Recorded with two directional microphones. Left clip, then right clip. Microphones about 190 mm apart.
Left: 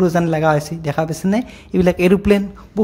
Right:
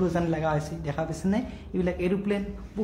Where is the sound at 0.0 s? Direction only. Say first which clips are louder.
Left 11 dB; 45° left (ahead or behind).